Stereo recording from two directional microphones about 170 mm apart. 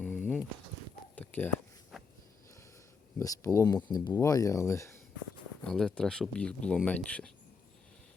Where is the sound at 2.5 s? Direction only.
15° left (ahead or behind).